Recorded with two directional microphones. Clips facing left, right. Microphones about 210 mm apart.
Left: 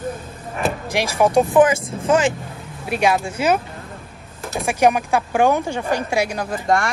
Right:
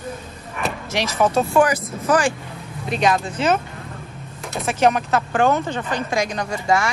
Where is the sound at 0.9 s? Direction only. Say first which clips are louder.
Left 2 dB; 15° left (ahead or behind).